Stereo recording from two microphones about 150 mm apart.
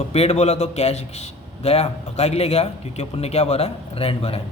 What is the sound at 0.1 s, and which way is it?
A man's voice, 45° left (ahead or behind).